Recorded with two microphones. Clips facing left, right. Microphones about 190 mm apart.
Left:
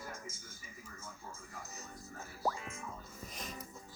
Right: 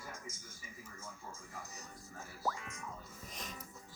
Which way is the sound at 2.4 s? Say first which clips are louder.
Left 3 dB; 25° left (ahead or behind).